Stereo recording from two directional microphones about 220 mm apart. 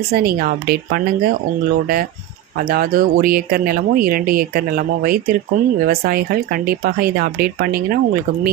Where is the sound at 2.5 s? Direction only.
40° right (ahead or behind).